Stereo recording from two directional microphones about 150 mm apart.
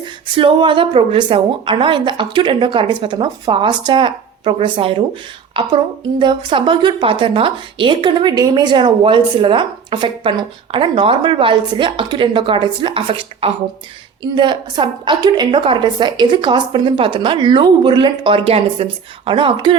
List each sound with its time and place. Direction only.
0.0 s a woman's voice: 35° right (ahead or behind)